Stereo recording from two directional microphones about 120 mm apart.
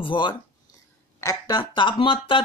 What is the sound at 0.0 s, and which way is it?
Speech, 45° left (ahead or behind).